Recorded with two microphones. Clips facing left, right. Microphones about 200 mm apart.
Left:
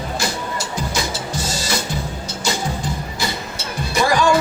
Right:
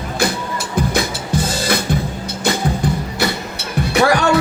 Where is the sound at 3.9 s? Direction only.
65° right (ahead or behind).